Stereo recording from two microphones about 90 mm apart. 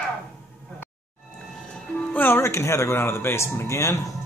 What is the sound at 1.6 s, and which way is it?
Speech, 10° left (ahead or behind).